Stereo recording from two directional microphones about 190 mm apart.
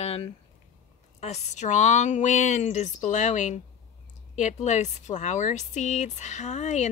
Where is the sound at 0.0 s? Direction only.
30° left (ahead or behind).